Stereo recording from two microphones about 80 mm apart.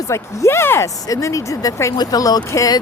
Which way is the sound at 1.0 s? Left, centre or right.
Left.